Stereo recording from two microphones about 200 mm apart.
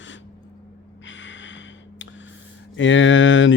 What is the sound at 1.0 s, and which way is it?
Gasp, 65° left (ahead or behind).